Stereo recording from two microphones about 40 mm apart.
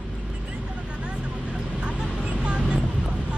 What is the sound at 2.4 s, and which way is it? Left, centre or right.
Vehicle, right.